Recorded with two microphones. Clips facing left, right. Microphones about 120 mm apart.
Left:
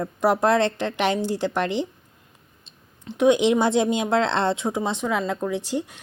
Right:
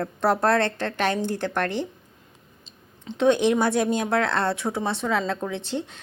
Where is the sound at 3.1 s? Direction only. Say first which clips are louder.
Left 2 dB; 15° left (ahead or behind).